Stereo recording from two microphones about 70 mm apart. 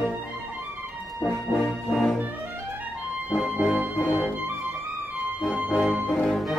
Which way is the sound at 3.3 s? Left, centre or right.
Centre.